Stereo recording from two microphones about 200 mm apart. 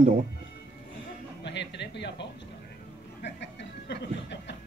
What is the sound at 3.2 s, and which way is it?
Chuckle, 60° left (ahead or behind).